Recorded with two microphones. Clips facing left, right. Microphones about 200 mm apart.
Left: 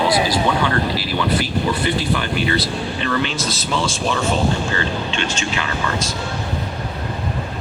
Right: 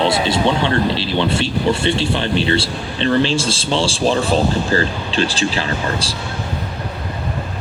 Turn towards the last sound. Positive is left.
turn(degrees=-30)  # may be behind; listen again after turning